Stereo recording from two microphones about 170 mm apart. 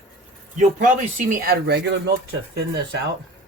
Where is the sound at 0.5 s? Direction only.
45° right (ahead or behind); by 1.8 s 70° right (ahead or behind).